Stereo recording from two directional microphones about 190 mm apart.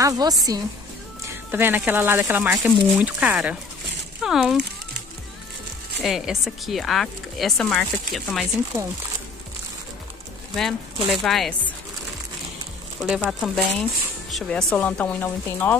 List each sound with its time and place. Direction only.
0.0 s a woman's voice: 20° right (ahead or behind); by 4.6 s centre (ahead or behind)
6.0 s speech: centre (ahead or behind)
10.5 s speech: centre (ahead or behind)
13.0 s speech: centre (ahead or behind)